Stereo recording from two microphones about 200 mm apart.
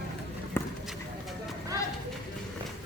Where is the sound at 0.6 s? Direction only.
10° left (ahead or behind).